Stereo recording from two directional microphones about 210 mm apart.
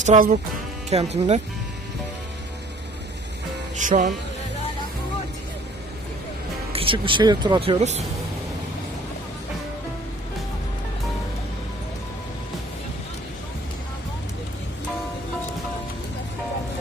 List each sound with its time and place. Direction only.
0.0 s speech: 35° right (ahead or behind)
3.8 s speech: 35° right (ahead or behind)
6.7 s speech: 25° right (ahead or behind)